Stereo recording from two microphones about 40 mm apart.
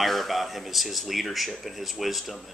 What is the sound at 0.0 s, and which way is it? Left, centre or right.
Speech, centre.